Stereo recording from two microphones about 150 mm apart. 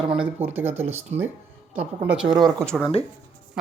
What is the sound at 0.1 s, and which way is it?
Speech, 10° right (ahead or behind).